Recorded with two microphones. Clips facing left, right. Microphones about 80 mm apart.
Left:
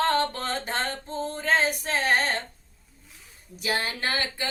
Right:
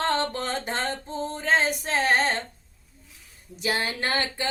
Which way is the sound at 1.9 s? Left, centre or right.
Right.